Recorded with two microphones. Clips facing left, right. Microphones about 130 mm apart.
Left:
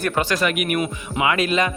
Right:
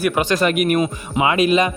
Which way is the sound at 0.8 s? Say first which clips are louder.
Right 3 dB; 25° right (ahead or behind).